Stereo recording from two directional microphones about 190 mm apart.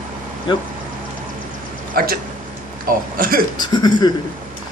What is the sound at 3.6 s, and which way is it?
Speech, 20° left (ahead or behind).